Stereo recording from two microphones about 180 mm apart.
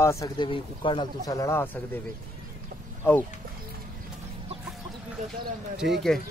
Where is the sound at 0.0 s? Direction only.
15° left (ahead or behind).